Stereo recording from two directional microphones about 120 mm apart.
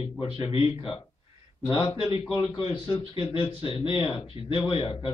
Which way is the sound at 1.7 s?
45° left (ahead or behind).